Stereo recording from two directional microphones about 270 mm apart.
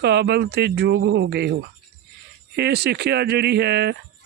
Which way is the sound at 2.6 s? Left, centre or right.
Right.